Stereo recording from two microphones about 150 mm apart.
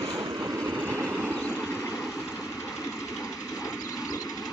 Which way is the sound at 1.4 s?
10° left (ahead or behind).